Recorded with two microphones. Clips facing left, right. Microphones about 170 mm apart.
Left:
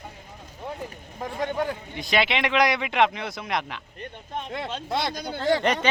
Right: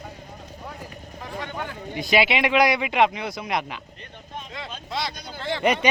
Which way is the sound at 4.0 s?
60° left (ahead or behind).